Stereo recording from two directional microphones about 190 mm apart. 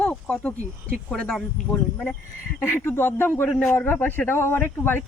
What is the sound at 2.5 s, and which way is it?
A man's voice, 10° left (ahead or behind).